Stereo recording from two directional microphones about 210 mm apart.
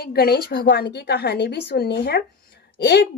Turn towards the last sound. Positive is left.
turn(degrees=55)  # may be behind; listen again after turning